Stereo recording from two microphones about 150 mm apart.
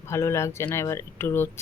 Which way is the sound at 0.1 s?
20° left (ahead or behind).